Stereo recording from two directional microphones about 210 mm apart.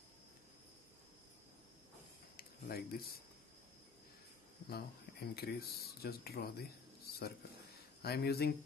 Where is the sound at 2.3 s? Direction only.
45° left (ahead or behind).